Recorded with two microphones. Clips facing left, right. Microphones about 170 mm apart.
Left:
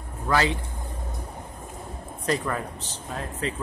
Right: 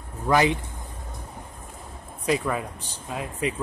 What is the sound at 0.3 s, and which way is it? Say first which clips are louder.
Speech: right 3 dB; 15° right (ahead or behind).